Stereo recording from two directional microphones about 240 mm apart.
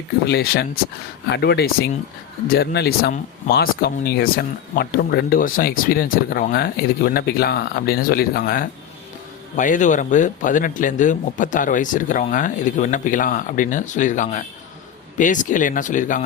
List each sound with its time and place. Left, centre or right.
0.3 s speech: left